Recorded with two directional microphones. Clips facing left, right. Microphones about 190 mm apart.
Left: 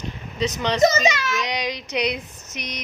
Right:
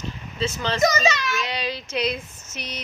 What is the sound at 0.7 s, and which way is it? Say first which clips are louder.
Speech: left 3 dB; 20° left (ahead or behind).